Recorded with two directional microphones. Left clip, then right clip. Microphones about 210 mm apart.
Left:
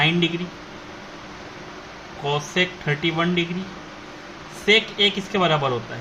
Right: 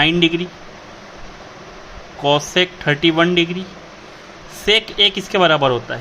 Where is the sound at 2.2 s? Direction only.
50° right (ahead or behind).